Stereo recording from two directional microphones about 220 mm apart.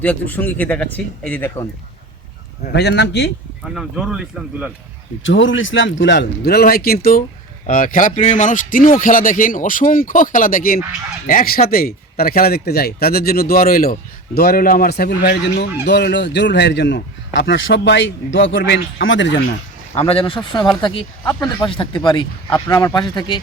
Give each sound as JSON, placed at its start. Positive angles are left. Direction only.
{"t": 0.0, "sound": "speech", "side_deg": 5}
{"t": 2.7, "sound": "a man's voice", "side_deg": 50}
{"t": 3.6, "sound": "speech", "side_deg": 0}
{"t": 5.2, "sound": "a man's voice", "side_deg": 60}
{"t": 20.0, "sound": "speech", "side_deg": 25}